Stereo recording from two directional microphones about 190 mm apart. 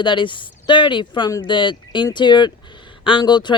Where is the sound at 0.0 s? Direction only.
25° left (ahead or behind).